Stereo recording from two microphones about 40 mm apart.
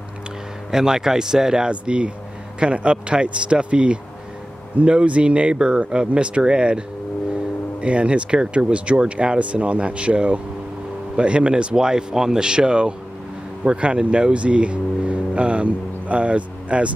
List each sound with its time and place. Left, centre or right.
0.7 s speech: centre
1.7 s speech: right
7.8 s speech: right